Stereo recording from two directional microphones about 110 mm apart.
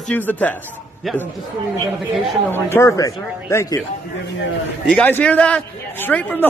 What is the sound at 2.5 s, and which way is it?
Speech, 20° left (ahead or behind).